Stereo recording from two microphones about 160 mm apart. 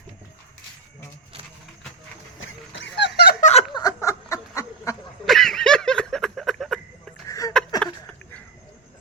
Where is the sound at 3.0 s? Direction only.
90° left.